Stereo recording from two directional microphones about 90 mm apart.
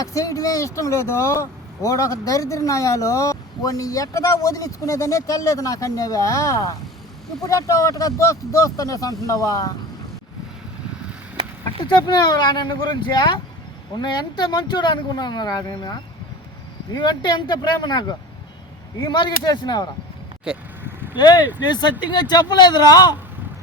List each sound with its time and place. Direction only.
0.0 s speech: 40° left (ahead or behind)
11.9 s speech: 55° left (ahead or behind)
20.5 s speech: 10° right (ahead or behind)
21.2 s speech: 55° left (ahead or behind)